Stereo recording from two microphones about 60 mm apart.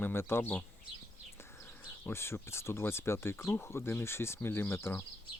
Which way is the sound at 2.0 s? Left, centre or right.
Left.